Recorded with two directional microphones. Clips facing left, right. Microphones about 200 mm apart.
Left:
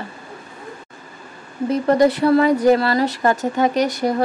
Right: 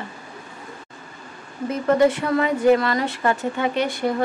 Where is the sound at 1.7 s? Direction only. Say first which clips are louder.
Left 2 dB; 35° left (ahead or behind).